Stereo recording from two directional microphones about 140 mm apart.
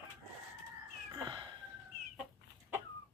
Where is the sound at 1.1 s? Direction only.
30° right (ahead or behind).